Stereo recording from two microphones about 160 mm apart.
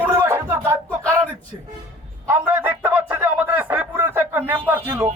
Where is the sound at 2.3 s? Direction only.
10° right (ahead or behind).